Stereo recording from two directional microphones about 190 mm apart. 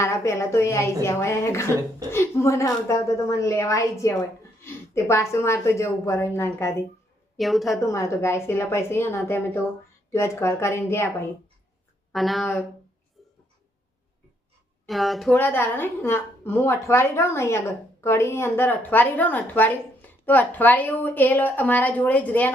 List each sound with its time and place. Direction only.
0.0 s a woman's voice: 15° left (ahead or behind)
7.3 s a woman's voice: centre (ahead or behind)
7.8 s a woman's voice: 15° left (ahead or behind)
12.1 s a woman's voice: centre (ahead or behind)
14.8 s a woman's voice: centre (ahead or behind)